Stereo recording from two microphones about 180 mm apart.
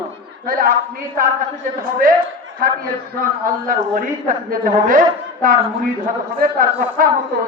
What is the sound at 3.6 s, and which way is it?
A woman's voice, 50° right (ahead or behind).